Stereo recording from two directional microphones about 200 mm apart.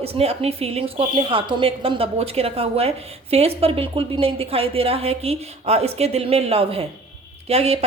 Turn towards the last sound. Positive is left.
turn(degrees=-30)  # may be behind; listen again after turning